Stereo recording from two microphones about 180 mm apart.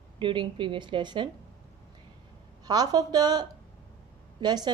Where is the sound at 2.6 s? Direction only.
20° right (ahead or behind).